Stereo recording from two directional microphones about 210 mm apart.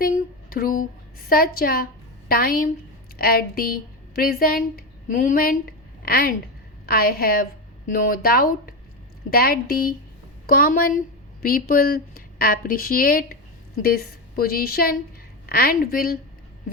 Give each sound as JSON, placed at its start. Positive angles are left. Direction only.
{"t": 0.0, "sound": "a woman's voice", "side_deg": 45}